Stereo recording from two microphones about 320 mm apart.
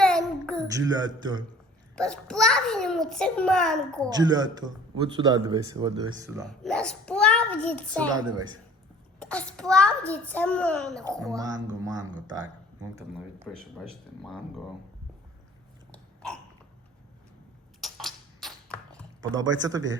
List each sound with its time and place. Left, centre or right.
0.0 s a sound: centre
0.7 s a man's voice: centre
2.0 s a child's voice: centre
4.1 s a man's voice: centre
6.3 s a child's voice: centre
8.1 s a man's voice: centre
9.1 s a child's voice: centre
11.2 s a man's voice: centre
13.4 s a child's voice: centre
15.9 s a sound: centre
17.7 s a sound: centre
19.3 s speech: right